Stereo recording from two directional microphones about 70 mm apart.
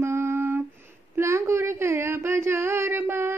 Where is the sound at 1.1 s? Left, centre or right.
Right.